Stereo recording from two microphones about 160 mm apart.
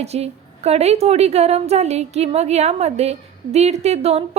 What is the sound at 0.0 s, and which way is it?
A woman's voice, 40° right (ahead or behind).